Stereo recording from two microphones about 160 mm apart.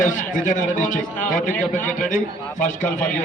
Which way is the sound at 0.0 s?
55° left (ahead or behind).